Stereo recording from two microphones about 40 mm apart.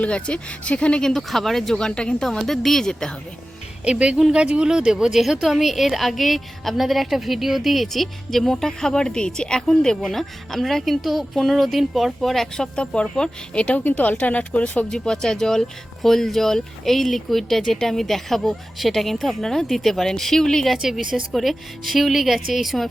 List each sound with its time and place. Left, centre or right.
0.0 s speech: left
1.0 s speech: centre
3.8 s a woman's voice: right; by 12.5 s centre
12.5 s speech: left
13.7 s speech: left
14.8 s a woman's voice: centre
20.8 s a woman's voice: centre
21.3 s a woman's voice: centre